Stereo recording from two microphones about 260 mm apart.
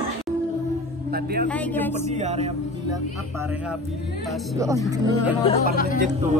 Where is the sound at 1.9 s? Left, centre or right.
Right.